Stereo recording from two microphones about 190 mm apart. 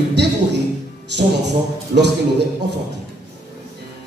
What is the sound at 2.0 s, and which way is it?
Speech, 65° right (ahead or behind).